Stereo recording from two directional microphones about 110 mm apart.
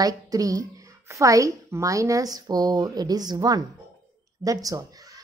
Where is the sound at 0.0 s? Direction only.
35° right (ahead or behind).